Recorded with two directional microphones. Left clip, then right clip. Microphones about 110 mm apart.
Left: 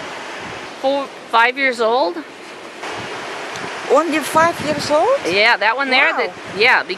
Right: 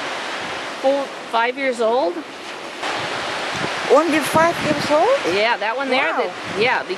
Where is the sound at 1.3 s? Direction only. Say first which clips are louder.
Left 5 dB; 25° left (ahead or behind).